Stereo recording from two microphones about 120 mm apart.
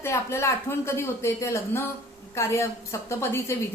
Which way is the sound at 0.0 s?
20° left (ahead or behind).